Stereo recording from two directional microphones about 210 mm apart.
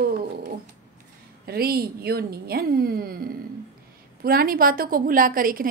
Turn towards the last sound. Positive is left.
turn(degrees=-40)  # may be behind; listen again after turning